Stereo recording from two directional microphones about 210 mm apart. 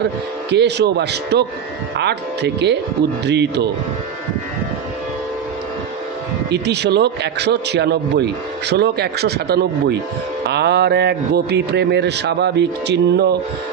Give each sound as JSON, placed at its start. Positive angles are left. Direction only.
{"t": 0.5, "sound": "speech", "side_deg": -55}
{"t": 6.5, "sound": "speech", "side_deg": -55}